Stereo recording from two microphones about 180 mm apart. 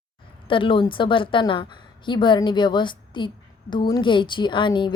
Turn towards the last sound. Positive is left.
turn(degrees=25)  # may be behind; listen again after turning